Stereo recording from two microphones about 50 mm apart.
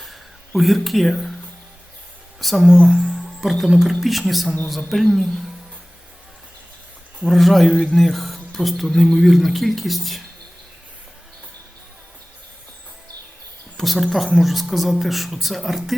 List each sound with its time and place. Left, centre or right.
0.0 s a sound: centre
2.4 s speech: centre
2.9 s music: centre
3.6 s speech: centre
7.3 s speech: centre
13.7 s speech: centre